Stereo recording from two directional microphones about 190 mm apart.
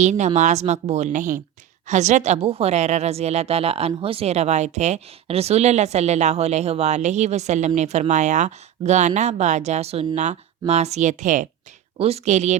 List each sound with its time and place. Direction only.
0.0 s a woman's voice: 40° right (ahead or behind)